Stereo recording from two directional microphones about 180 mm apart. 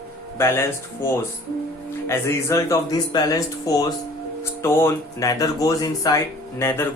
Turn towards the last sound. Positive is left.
turn(degrees=15)  # may be behind; listen again after turning